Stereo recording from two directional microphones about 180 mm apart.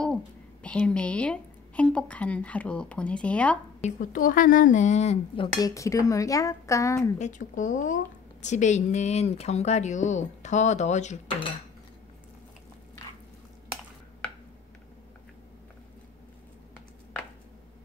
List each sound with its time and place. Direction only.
0.0 s a woman's voice: 5° left (ahead or behind)
3.8 s speech: 45° left (ahead or behind)
5.6 s speech: 20° left (ahead or behind)
7.2 s speech: 45° left (ahead or behind)